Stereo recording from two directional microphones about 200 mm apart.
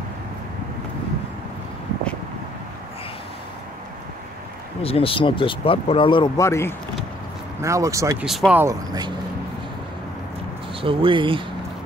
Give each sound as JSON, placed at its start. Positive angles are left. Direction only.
{"t": 4.8, "sound": "speech", "side_deg": 30}
{"t": 7.6, "sound": "speech", "side_deg": -15}
{"t": 8.3, "sound": "speech", "side_deg": -5}
{"t": 8.6, "sound": "speech", "side_deg": -20}
{"t": 10.8, "sound": "speech", "side_deg": -25}